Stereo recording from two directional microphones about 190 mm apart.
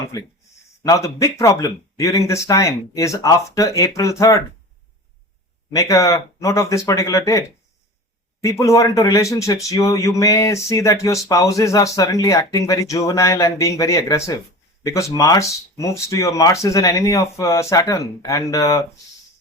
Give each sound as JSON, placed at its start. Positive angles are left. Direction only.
{"t": 0.9, "sound": "speech", "side_deg": 15}
{"t": 5.7, "sound": "speech", "side_deg": 15}